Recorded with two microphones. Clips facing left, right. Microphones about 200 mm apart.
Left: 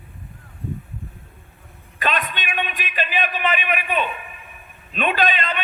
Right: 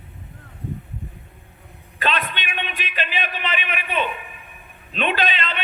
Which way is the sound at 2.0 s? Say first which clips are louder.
Even; 45° left (ahead or behind).